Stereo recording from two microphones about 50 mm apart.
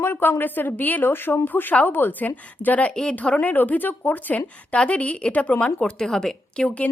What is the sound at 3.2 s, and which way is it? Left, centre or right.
Speech, left.